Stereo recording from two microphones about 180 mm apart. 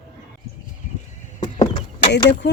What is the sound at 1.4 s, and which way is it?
Chop, 25° left (ahead or behind).